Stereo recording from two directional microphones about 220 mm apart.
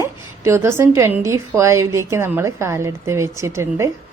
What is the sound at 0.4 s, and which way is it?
A woman's voice, 10° right (ahead or behind).